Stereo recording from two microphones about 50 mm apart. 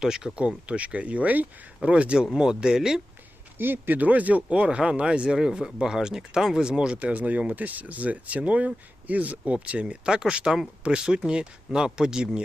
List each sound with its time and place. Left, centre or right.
0.0 s speech: centre
0.3 s speech: right
2.1 s speech: centre
3.6 s speech: right; by 12.4 s centre